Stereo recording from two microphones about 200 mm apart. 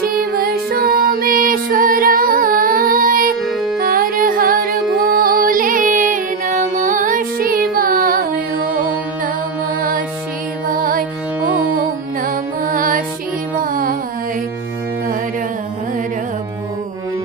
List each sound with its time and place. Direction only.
0.0 s music: 45° right (ahead or behind)